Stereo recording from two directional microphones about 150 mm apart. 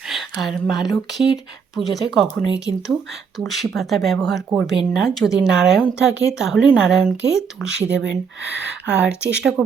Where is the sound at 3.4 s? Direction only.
Centre (ahead or behind).